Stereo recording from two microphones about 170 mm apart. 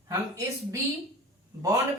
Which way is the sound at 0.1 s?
15° right (ahead or behind).